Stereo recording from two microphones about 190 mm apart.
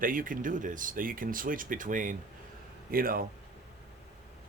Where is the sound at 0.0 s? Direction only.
45° right (ahead or behind).